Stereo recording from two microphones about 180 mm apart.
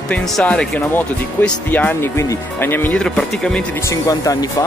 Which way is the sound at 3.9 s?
20° left (ahead or behind).